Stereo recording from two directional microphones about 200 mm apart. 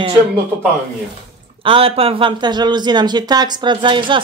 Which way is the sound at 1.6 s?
25° right (ahead or behind).